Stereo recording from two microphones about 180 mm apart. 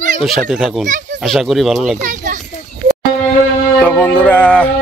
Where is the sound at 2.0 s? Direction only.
45° right (ahead or behind).